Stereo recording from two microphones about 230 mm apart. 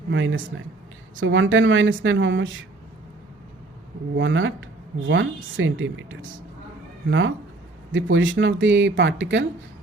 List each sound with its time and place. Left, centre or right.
0.1 s speech: right
4.2 s speech: right